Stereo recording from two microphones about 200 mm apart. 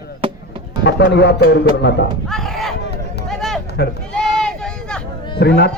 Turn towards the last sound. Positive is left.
turn(degrees=55)  # may be behind; listen again after turning